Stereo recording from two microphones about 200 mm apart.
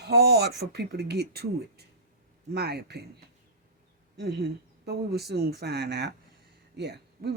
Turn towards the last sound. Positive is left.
turn(degrees=-55)  # may be behind; listen again after turning